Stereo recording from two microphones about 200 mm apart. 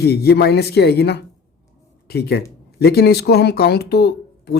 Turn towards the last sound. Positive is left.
turn(degrees=50)  # may be behind; listen again after turning